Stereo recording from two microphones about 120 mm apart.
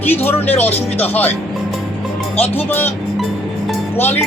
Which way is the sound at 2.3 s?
15° left (ahead or behind).